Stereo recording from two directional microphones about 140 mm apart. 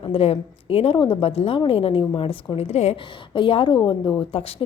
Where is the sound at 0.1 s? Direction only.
45° left (ahead or behind).